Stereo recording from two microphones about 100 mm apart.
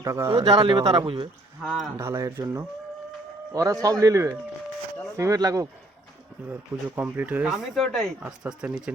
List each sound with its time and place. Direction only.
0.0 s speech: 30° right (ahead or behind)
0.4 s speech: 60° right (ahead or behind); by 1.0 s 45° right (ahead or behind)
1.0 s speech: 55° right (ahead or behind)
2.0 s a man's voice: 25° right (ahead or behind)
6.5 s speech: 15° right (ahead or behind)
7.4 s speech: centre (ahead or behind)